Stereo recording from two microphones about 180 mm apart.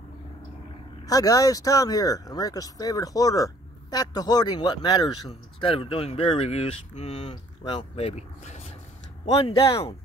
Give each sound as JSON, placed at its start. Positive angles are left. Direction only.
{"t": 1.0, "sound": "speech", "side_deg": 20}
{"t": 9.5, "sound": "speech", "side_deg": 20}